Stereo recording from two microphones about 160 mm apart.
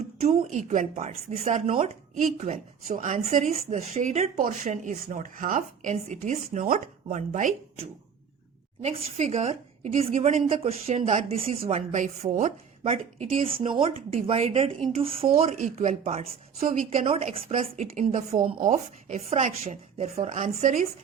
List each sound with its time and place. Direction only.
0.2 s speech: 45° right (ahead or behind)
8.8 s speech: 45° right (ahead or behind)
12.8 s speech: 35° right (ahead or behind)
15.5 s speech: 50° right (ahead or behind)